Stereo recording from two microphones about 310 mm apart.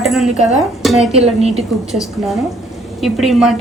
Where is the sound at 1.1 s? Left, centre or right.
Centre.